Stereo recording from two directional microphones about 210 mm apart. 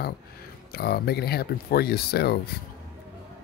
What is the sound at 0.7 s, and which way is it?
Speech, 45° left (ahead or behind).